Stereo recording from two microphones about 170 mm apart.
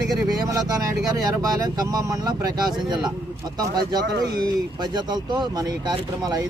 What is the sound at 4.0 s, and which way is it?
Speech, 75° right (ahead or behind).